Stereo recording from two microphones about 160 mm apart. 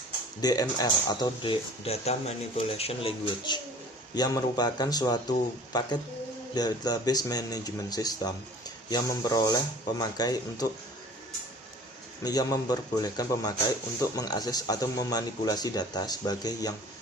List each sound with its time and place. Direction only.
0.4 s speech: 25° left (ahead or behind)
12.2 s speech: 25° left (ahead or behind)